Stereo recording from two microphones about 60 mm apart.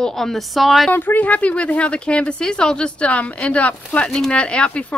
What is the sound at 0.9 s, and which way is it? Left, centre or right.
Speech, left.